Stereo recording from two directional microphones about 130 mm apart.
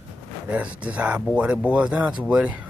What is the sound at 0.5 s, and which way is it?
Speech, 10° right (ahead or behind).